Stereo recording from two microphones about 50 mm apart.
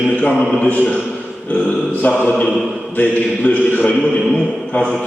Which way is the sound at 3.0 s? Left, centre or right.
Left.